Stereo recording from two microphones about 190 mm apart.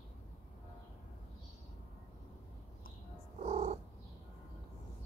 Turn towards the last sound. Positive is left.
turn(degrees=-35)  # may be behind; listen again after turning